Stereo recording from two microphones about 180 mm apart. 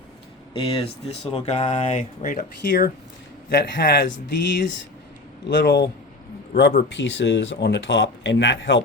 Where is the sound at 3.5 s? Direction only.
65° left (ahead or behind).